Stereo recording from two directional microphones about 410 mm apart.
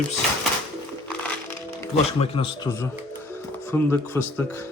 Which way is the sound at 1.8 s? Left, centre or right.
Centre.